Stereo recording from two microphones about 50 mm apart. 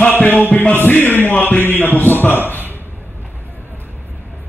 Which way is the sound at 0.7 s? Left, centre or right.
Left.